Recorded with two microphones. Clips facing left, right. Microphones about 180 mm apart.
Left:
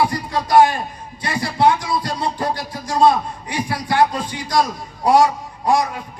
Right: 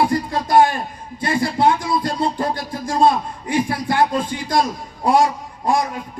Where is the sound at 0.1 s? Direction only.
50° right (ahead or behind).